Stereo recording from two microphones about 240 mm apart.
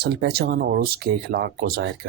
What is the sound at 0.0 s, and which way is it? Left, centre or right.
Speech, right.